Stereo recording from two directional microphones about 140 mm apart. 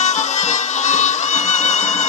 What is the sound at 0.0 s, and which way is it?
Music, 55° left (ahead or behind).